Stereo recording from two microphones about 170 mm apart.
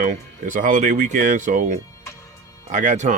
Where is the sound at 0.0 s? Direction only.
50° right (ahead or behind).